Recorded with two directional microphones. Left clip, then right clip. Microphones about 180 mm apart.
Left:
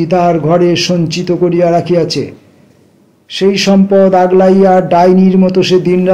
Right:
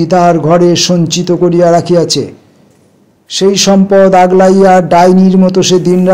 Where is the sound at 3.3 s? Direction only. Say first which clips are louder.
Right 2 dB; 30° right (ahead or behind).